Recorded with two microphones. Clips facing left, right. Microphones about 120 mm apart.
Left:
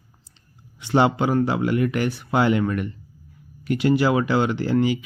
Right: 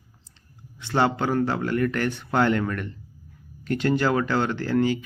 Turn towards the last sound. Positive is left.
turn(degrees=15)  # may be behind; listen again after turning